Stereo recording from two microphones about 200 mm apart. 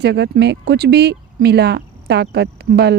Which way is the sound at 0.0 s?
55° right (ahead or behind).